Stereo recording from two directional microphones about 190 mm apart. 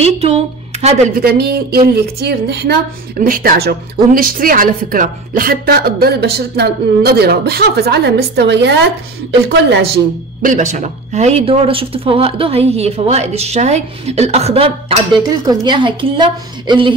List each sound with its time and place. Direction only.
0.0 s a sound: 35° right (ahead or behind)
1.1 s a woman's voice: 55° right (ahead or behind)
10.5 s a woman's voice: 40° right (ahead or behind)